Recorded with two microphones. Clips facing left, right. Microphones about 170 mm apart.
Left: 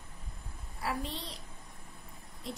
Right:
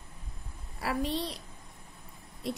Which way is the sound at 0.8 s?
70° right (ahead or behind).